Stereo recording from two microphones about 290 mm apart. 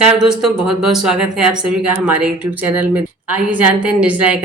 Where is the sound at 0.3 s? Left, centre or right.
Centre.